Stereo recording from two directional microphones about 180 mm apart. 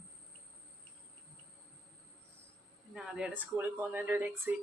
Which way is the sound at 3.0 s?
5° right (ahead or behind).